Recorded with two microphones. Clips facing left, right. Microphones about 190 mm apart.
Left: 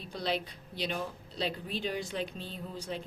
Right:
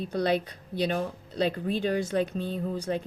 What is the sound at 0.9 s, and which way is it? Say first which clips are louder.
Speech: right 7 dB; 45° right (ahead or behind).